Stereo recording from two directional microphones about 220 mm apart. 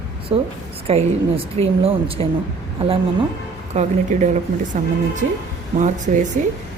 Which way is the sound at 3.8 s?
30° right (ahead or behind).